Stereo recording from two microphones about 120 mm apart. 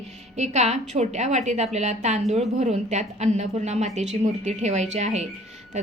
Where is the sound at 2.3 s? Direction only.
70° right (ahead or behind).